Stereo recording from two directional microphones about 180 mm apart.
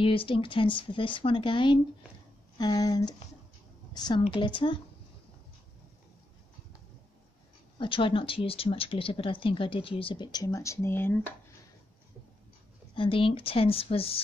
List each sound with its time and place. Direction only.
0.0 s a woman's voice: 30° left (ahead or behind)
7.8 s speech: 30° left (ahead or behind); by 11.3 s 10° left (ahead or behind)
12.9 s a woman's voice: 30° left (ahead or behind)